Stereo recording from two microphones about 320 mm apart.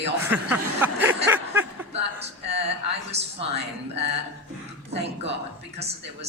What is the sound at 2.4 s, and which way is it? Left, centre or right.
A man's voice, centre.